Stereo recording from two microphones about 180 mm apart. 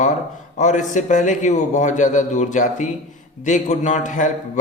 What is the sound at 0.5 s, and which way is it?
A man's voice, 40° left (ahead or behind).